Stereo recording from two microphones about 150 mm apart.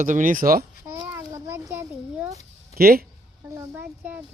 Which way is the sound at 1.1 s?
15° right (ahead or behind).